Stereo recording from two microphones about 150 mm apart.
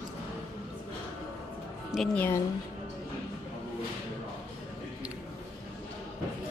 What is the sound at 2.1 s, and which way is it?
Speech, 15° left (ahead or behind).